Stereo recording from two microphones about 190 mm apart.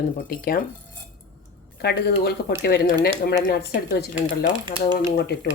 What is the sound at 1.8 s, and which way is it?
Speech, 60° left (ahead or behind).